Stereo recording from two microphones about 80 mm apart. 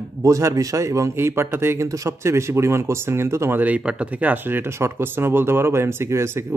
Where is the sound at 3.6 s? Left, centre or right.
Centre; by 6.5 s right.